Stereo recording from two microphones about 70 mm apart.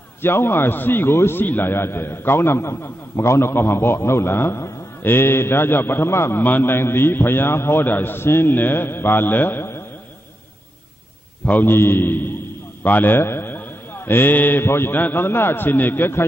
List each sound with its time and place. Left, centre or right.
0.2 s a man's voice: left
11.4 s a man's voice: left